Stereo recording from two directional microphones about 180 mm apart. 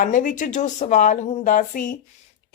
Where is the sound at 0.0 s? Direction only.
45° left (ahead or behind).